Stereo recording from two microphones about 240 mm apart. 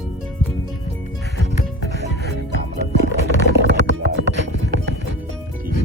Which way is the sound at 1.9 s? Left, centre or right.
Right.